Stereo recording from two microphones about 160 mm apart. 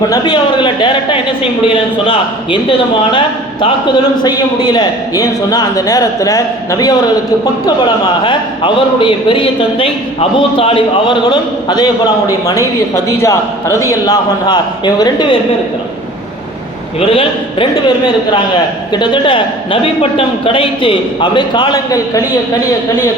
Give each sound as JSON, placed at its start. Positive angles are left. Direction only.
{"t": 0.1, "sound": "a sound", "side_deg": 30}
{"t": 1.6, "sound": "a man's voice", "side_deg": 30}
{"t": 8.2, "sound": "a man's voice", "side_deg": 30}
{"t": 17.0, "sound": "a man's voice", "side_deg": 35}